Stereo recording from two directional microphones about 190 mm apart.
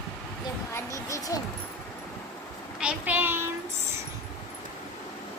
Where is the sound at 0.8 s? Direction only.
15° left (ahead or behind).